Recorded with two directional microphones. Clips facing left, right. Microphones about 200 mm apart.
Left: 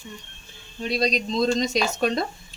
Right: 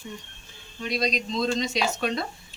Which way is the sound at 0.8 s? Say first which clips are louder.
Left 3 dB; 35° left (ahead or behind).